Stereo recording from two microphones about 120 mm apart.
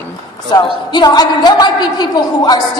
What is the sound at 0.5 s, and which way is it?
A woman's voice, 40° left (ahead or behind).